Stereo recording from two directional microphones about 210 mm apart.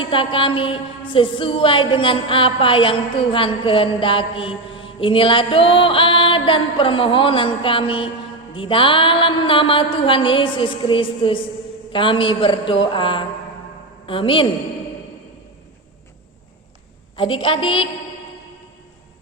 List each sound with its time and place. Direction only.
0.1 s mantra: 25° left (ahead or behind)
17.2 s mantra: 25° left (ahead or behind)